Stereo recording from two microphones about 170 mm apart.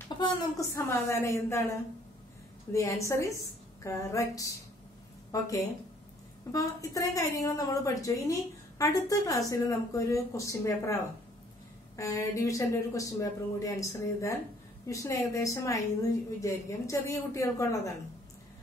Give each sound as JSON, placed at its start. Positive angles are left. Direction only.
{"t": 0.2, "sound": "a woman's voice", "side_deg": 25}
{"t": 6.5, "sound": "a woman's voice", "side_deg": 20}
{"t": 12.0, "sound": "a woman's voice", "side_deg": 20}